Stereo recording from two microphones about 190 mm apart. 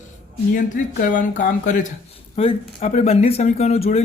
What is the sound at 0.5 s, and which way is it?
Speech, 45° left (ahead or behind).